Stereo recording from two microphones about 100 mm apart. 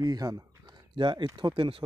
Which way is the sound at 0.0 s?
40° right (ahead or behind).